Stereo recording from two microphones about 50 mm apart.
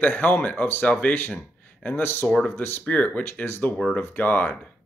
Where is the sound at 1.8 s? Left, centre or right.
Left.